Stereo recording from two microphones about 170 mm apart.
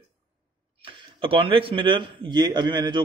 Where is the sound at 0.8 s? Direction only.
30° right (ahead or behind).